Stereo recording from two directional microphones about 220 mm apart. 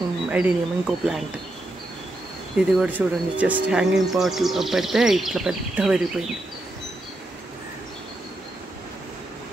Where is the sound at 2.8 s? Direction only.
5° right (ahead or behind).